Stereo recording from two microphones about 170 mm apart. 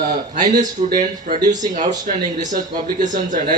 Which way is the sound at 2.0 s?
50° right (ahead or behind).